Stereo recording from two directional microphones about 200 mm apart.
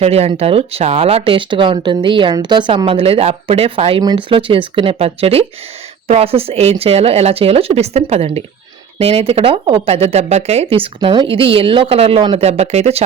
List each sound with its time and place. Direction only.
0.0 s speech: 30° right (ahead or behind)